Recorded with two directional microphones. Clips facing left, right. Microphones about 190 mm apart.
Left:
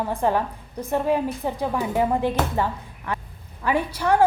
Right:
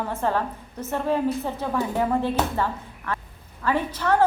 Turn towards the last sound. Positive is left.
turn(degrees=10)  # may be behind; listen again after turning